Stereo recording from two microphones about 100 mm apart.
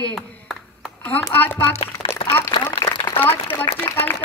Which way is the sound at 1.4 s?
20° left (ahead or behind).